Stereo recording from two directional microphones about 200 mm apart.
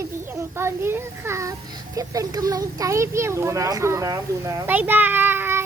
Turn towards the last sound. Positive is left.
turn(degrees=-10)  # may be behind; listen again after turning